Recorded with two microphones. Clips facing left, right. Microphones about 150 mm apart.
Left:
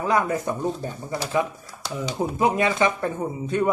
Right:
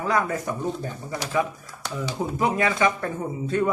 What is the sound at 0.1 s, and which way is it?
Speech, 20° left (ahead or behind).